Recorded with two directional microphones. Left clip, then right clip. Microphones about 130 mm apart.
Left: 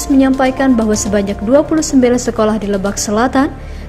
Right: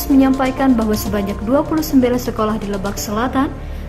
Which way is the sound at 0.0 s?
25° left (ahead or behind).